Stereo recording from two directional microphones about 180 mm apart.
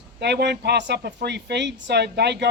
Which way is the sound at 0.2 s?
70° right (ahead or behind).